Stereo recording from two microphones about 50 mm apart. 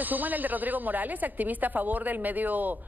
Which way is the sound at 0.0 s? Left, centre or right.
Right.